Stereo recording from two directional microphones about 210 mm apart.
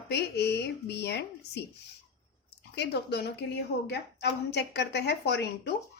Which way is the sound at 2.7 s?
50° left (ahead or behind).